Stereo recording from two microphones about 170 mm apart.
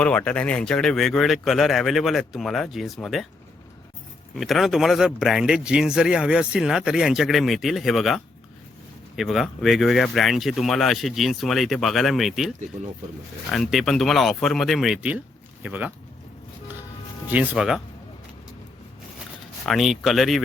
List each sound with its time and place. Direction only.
0.0 s speech: 5° left (ahead or behind)
4.4 s speech: centre (ahead or behind)
17.2 s speech: 5° right (ahead or behind)
19.6 s speech: centre (ahead or behind)